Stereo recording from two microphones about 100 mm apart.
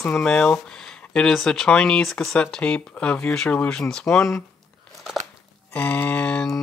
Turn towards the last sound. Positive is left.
turn(degrees=10)  # may be behind; listen again after turning